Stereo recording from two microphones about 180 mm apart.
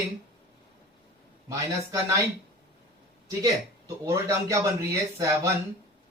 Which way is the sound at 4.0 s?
15° right (ahead or behind).